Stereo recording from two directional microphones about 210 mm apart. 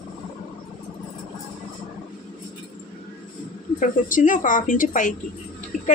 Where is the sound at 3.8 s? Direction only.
40° left (ahead or behind).